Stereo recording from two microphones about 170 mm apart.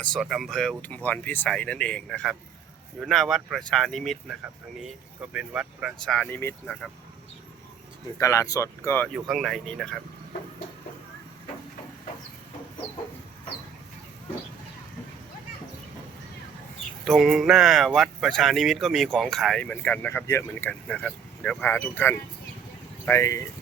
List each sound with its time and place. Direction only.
0.2 s speech: centre (ahead or behind)
8.2 s speech: 20° left (ahead or behind)
9.1 s speech: centre (ahead or behind)
17.1 s speech: centre (ahead or behind); by 23.5 s 20° left (ahead or behind)